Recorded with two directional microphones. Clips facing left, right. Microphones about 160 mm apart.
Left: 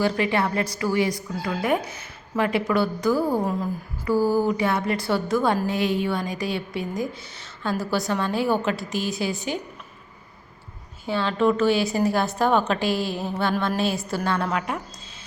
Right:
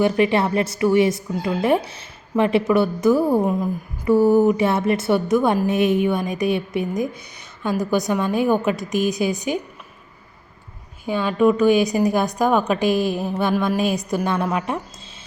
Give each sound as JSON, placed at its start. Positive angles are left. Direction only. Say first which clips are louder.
{"t": 0.0, "sound": "a woman's voice", "louder": "right 5 dB", "side_deg": -20}
{"t": 11.0, "sound": "a woman's voice", "louder": "right 4 dB", "side_deg": -15}